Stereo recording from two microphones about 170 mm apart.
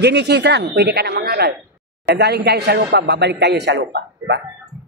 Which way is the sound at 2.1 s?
80° right.